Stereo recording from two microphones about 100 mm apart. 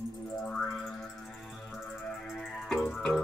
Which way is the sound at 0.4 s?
10° left (ahead or behind).